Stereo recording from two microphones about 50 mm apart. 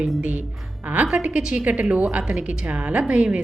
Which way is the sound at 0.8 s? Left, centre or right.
Right.